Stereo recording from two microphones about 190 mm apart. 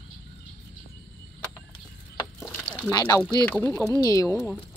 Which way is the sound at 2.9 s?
20° left (ahead or behind).